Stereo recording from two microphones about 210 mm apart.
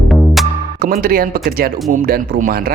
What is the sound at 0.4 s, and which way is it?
Music, centre (ahead or behind).